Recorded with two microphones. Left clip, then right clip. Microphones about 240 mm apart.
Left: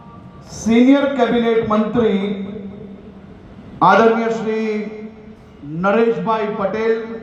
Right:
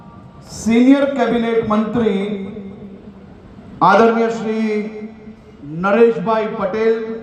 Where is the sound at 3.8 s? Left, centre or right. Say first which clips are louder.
Even; right.